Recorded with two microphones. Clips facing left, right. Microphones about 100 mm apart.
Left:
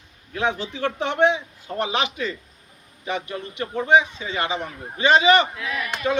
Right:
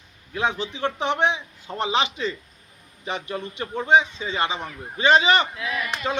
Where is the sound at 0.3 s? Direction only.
20° right (ahead or behind).